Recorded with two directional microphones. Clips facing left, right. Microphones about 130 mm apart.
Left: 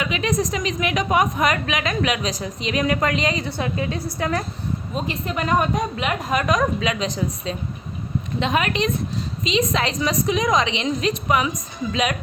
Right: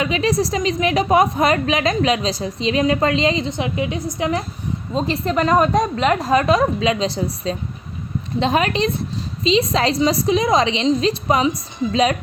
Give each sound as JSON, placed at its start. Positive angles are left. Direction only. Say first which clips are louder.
{"t": 0.0, "sound": "a woman's voice", "louder": "right 4 dB", "side_deg": -35}
{"t": 4.9, "sound": "a woman's voice", "louder": "right 8 dB", "side_deg": -35}